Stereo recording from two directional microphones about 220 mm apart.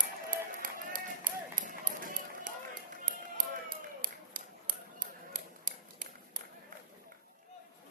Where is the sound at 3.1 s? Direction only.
40° right (ahead or behind).